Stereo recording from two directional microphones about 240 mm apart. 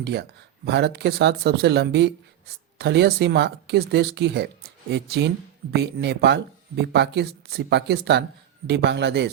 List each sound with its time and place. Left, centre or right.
0.0 s speech: right